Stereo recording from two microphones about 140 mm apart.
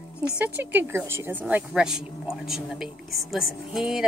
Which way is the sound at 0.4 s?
10° right (ahead or behind).